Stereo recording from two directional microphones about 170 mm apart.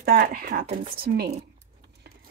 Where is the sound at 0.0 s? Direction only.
60° right (ahead or behind).